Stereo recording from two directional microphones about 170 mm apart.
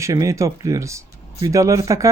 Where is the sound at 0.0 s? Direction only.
20° right (ahead or behind).